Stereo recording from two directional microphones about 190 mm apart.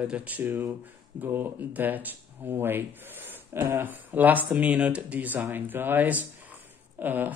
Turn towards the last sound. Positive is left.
turn(degrees=-10)  # may be behind; listen again after turning